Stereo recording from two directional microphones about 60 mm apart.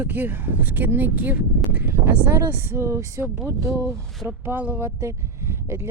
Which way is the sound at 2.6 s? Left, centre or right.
Right.